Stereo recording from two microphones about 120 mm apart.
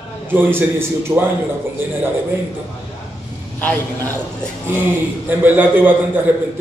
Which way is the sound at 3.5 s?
15° left (ahead or behind).